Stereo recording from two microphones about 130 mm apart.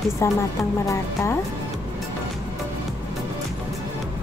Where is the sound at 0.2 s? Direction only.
20° left (ahead or behind).